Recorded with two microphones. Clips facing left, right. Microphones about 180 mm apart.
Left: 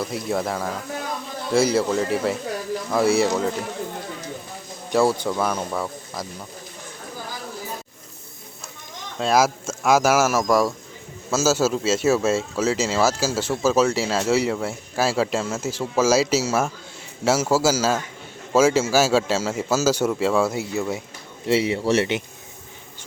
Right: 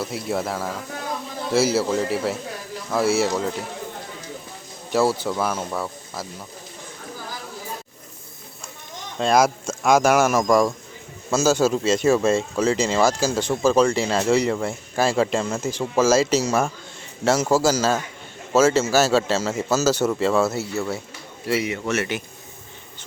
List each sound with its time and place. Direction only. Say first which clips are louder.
0.0 s speech: left 1 dB; 5° right (ahead or behind)
4.9 s speech: left 1 dB; 5° right (ahead or behind)
9.1 s a man's voice: right 1 dB; 5° left (ahead or behind)
21.4 s speech: left 4 dB; 30° left (ahead or behind)